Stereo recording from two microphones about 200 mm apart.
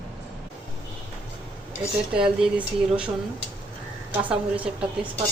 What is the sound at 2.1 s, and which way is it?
Speech, 5° right (ahead or behind).